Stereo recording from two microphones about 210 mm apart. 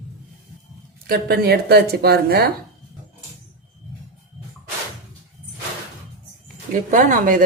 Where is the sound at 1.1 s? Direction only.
50° right (ahead or behind).